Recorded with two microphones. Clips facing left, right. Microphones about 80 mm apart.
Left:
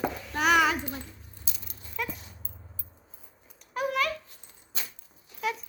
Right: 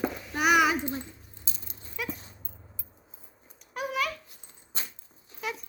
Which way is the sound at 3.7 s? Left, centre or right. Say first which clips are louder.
Left 3 dB; centre.